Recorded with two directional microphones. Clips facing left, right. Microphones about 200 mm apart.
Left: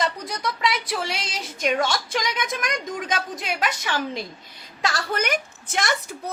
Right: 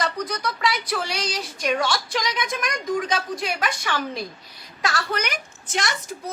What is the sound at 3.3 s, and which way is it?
Speech, 20° left (ahead or behind).